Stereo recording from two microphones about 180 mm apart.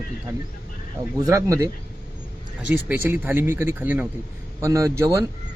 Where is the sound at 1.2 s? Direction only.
15° right (ahead or behind).